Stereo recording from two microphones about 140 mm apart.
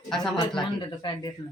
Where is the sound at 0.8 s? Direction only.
30° left (ahead or behind).